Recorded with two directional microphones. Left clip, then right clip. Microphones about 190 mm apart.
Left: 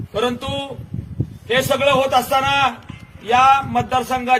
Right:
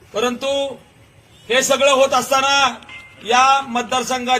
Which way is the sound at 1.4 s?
Centre (ahead or behind).